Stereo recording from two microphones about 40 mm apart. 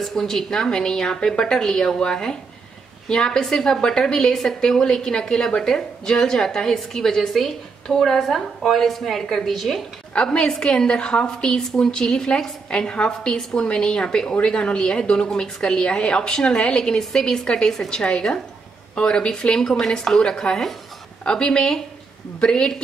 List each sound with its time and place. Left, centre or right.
0.0 s a woman's voice: centre
10.1 s a woman's voice: centre